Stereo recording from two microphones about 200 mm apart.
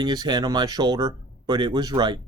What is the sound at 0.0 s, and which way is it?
Speech, 20° right (ahead or behind).